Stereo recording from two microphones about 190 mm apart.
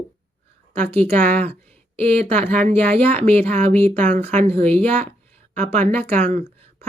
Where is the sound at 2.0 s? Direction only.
30° right (ahead or behind).